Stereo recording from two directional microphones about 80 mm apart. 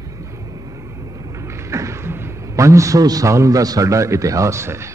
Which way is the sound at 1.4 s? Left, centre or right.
Right.